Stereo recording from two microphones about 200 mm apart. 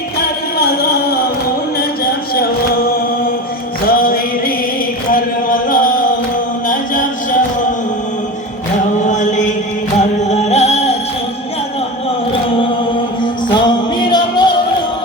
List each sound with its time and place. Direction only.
3.8 s music: 45° left (ahead or behind)
5.1 s chant: 45° left (ahead or behind)
6.7 s a sound: 40° left (ahead or behind)
9.0 s chant: 35° left (ahead or behind)
10.2 s music: 35° left (ahead or behind)
14.1 s music: 20° left (ahead or behind)